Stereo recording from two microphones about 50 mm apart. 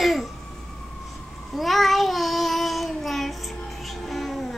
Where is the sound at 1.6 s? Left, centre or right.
Centre.